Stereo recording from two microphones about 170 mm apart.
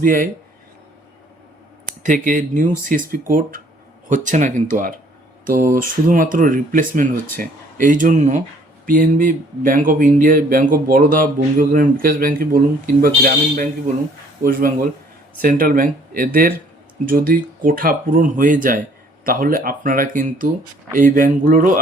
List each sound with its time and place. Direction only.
0.0 s speech: 55° right (ahead or behind)
1.9 s speech: 50° right (ahead or behind)